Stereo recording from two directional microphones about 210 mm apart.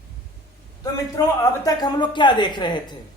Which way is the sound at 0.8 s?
15° left (ahead or behind).